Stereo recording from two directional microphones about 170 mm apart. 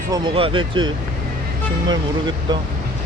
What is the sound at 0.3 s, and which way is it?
Speech, 30° right (ahead or behind).